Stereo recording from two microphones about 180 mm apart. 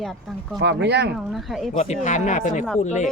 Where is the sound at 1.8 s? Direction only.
45° left (ahead or behind).